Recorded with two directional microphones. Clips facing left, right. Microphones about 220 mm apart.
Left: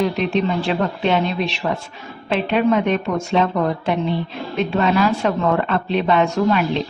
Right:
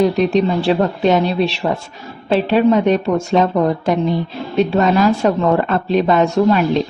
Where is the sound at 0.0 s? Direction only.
35° right (ahead or behind).